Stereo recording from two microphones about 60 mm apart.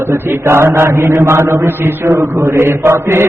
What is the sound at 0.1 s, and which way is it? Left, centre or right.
Mantra, right.